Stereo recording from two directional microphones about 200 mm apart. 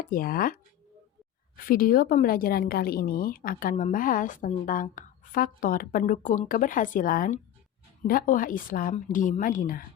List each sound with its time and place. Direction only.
0.0 s a woman's voice: 45° left (ahead or behind)